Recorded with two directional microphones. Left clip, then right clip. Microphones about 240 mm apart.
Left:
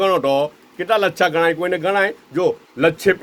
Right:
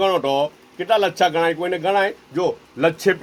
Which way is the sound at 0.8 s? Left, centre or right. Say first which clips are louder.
Left 1 dB; left.